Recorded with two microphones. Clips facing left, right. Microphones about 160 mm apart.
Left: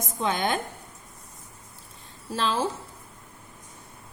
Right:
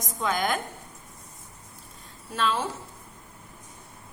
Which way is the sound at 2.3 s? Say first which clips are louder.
Left 1 dB; 30° left (ahead or behind).